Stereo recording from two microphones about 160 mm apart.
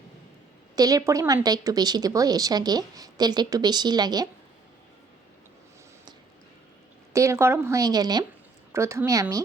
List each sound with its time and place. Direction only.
0.8 s a woman's voice: 25° right (ahead or behind)
7.1 s a woman's voice: 20° right (ahead or behind)